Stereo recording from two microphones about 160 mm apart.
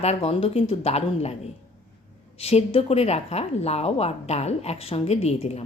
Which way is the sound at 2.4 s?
40° left (ahead or behind).